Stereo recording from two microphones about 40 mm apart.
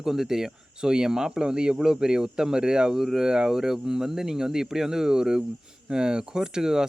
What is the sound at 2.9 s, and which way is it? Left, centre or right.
Speech, centre.